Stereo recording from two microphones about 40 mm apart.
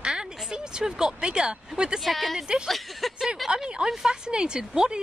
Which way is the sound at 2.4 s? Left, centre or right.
Centre.